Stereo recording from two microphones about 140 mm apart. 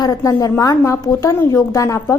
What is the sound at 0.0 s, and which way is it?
A woman's voice, 30° left (ahead or behind).